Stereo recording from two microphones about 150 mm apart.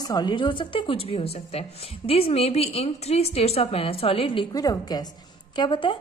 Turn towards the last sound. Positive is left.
turn(degrees=35)  # may be behind; listen again after turning